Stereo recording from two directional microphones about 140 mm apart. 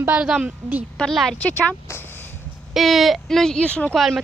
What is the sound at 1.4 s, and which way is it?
Speech, 15° left (ahead or behind).